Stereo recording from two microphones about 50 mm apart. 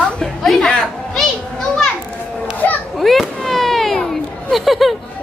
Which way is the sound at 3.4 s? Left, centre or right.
Centre.